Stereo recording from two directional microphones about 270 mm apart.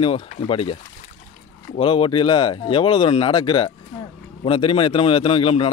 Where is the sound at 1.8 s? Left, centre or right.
Centre.